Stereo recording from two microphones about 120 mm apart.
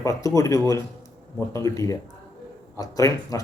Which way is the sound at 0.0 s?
25° left (ahead or behind).